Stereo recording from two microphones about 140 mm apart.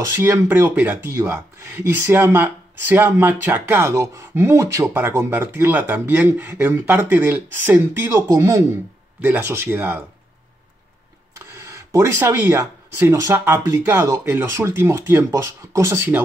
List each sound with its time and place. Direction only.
0.0 s speech: 15° right (ahead or behind)
11.3 s speech: 20° right (ahead or behind)